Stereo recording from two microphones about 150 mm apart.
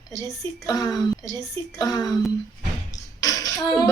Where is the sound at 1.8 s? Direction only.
25° left (ahead or behind).